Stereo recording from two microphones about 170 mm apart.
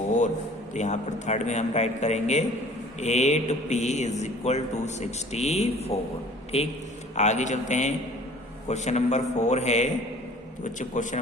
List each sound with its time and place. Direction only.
0.7 s a man's voice: 45° left (ahead or behind)